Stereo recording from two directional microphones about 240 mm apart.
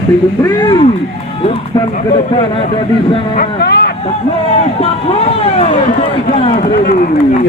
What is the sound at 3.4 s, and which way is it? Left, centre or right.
Speech, left.